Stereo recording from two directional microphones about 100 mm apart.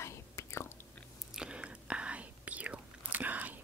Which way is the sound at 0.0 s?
30° left (ahead or behind).